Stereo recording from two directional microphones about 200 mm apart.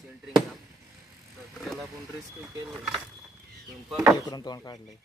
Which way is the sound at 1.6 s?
Centre (ahead or behind).